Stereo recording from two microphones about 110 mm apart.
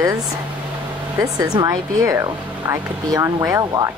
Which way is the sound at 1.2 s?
35° right (ahead or behind).